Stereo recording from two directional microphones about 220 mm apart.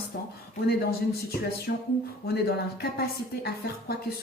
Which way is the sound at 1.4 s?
45° left (ahead or behind).